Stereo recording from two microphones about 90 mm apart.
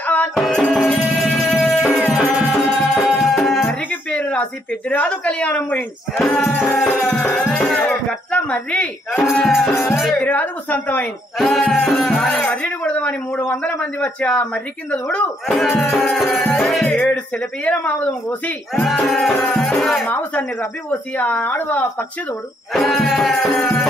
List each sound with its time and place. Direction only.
0.0 s music: 15° left (ahead or behind)
0.4 s music: centre (ahead or behind)
4.3 s speech: 15° left (ahead or behind)
6.1 s music: centre (ahead or behind)
7.3 s a sound: 15° left (ahead or behind)
9.2 s music: centre (ahead or behind)
10.1 s speech: 15° left (ahead or behind)
11.3 s music: centre (ahead or behind)
12.4 s speech: 15° left (ahead or behind)
15.4 s music: centre (ahead or behind)
16.9 s speech: 15° left (ahead or behind)
18.7 s music: centre (ahead or behind)
20.1 s speech: 15° left (ahead or behind)
22.7 s music: centre (ahead or behind)